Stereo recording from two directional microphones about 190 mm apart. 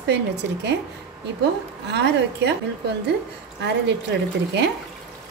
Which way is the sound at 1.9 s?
65° right (ahead or behind).